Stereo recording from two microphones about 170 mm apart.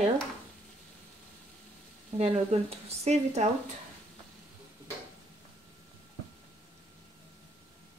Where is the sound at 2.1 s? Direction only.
40° right (ahead or behind).